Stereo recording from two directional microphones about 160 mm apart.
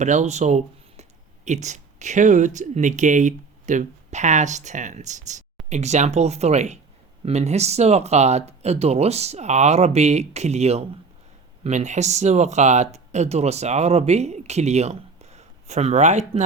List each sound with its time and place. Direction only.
0.0 s speech: 45° right (ahead or behind)